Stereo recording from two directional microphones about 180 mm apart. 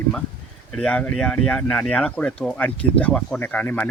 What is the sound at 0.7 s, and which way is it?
Speech, 5° left (ahead or behind).